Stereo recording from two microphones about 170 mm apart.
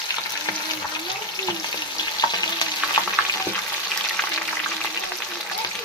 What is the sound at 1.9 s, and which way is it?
Frying, 25° left (ahead or behind).